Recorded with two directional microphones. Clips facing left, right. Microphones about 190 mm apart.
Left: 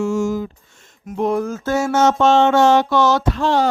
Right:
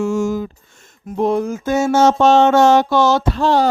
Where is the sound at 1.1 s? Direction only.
30° right (ahead or behind).